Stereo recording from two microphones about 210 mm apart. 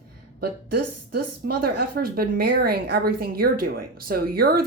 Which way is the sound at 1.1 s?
50° right (ahead or behind).